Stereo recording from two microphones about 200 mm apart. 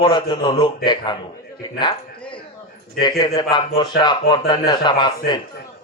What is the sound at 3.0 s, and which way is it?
A man's voice, 20° left (ahead or behind).